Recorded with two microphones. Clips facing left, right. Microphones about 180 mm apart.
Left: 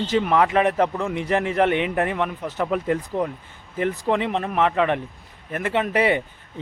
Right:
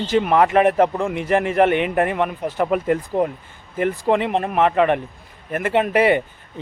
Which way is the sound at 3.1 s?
45° right (ahead or behind).